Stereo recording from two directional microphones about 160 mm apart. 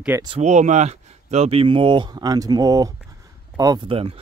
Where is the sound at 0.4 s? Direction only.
45° right (ahead or behind).